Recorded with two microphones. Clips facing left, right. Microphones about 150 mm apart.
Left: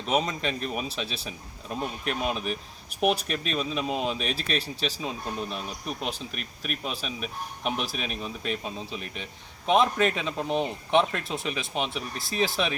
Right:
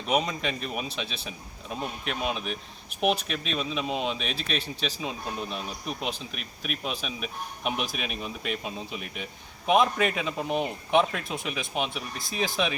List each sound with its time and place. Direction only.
0.0 s speech: 5° right (ahead or behind)
1.0 s speech: 35° left (ahead or behind)
1.7 s speech: centre (ahead or behind)